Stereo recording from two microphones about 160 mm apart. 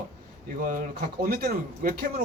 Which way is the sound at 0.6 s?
60° right (ahead or behind).